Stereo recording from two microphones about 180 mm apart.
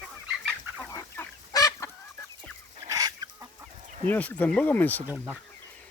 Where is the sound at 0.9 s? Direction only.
20° left (ahead or behind).